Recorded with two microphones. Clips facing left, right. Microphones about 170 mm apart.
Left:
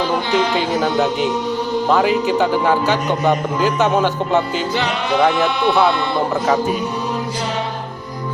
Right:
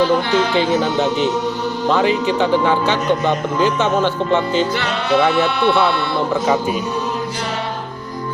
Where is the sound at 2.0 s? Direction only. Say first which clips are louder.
Right 1 dB; 5° left (ahead or behind).